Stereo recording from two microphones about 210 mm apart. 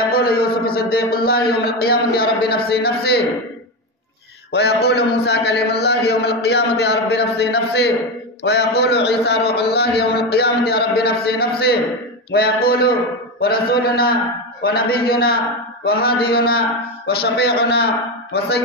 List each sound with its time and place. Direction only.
0.1 s a man's voice: 45° left (ahead or behind)
4.5 s a man's voice: 50° left (ahead or behind)